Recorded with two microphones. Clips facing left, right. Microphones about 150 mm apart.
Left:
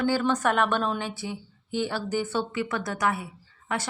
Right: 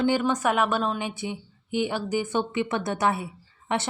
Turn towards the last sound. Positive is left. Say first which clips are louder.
# right 3 dB
turn(degrees=-25)  # may be behind; listen again after turning